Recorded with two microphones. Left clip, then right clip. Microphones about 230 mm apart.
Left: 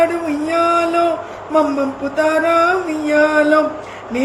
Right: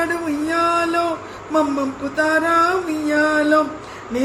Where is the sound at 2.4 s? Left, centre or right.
Centre.